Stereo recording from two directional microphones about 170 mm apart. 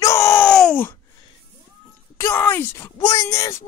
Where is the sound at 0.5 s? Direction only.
5° left (ahead or behind).